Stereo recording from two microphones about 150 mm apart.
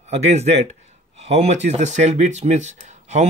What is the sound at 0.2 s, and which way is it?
Speech, 45° right (ahead or behind).